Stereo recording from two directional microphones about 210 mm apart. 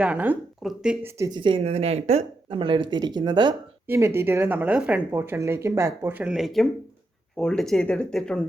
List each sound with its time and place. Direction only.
0.0 s speech: 5° right (ahead or behind)
1.2 s speech: 20° right (ahead or behind); by 8.4 s 5° left (ahead or behind)